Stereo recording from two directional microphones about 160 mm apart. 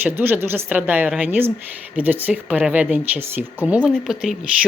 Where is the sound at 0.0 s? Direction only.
10° right (ahead or behind).